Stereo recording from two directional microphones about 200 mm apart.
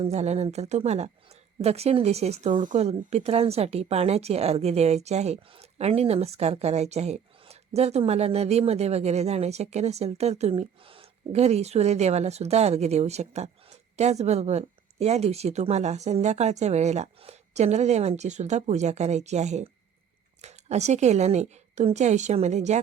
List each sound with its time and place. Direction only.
0.0 s speech: 35° right (ahead or behind)